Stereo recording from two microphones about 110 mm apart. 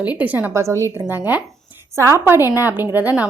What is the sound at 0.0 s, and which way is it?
Speech, 15° right (ahead or behind).